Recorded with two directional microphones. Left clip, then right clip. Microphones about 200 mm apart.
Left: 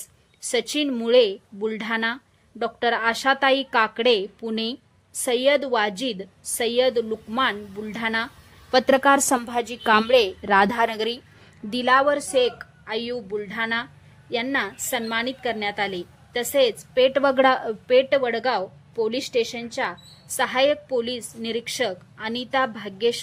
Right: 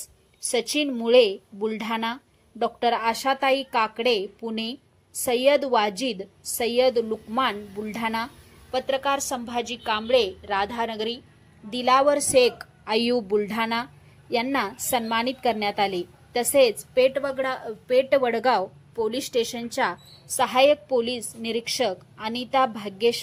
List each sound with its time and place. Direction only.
0.5 s a woman's voice: 5° left (ahead or behind)
8.7 s a woman's voice: 35° left (ahead or behind)
11.7 s speech: 10° left (ahead or behind)
17.2 s a woman's voice: 30° left (ahead or behind)
17.8 s speech: 10° left (ahead or behind)